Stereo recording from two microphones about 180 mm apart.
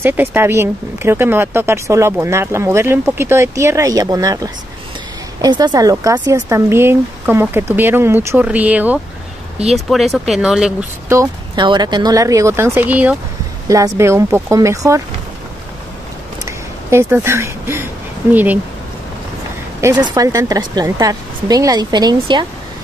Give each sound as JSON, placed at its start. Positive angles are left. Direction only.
{"t": 0.0, "sound": "speech", "side_deg": -10}
{"t": 11.1, "sound": "speech", "side_deg": -20}
{"t": 16.4, "sound": "a sound", "side_deg": -15}
{"t": 18.3, "sound": "speech", "side_deg": -10}
{"t": 19.8, "sound": "speech", "side_deg": -15}